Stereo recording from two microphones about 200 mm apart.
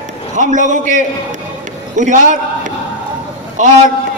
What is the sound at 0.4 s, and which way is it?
A man's voice, 40° right (ahead or behind).